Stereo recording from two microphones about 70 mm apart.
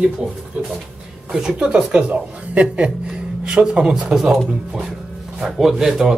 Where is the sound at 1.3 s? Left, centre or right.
Centre.